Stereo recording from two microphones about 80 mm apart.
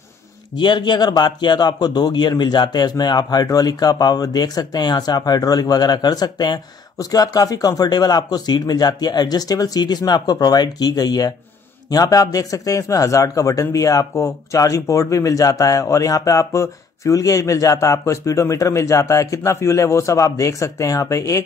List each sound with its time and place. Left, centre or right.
0.6 s speech: left